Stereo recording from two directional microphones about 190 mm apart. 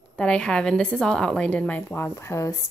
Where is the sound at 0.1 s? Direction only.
5° left (ahead or behind).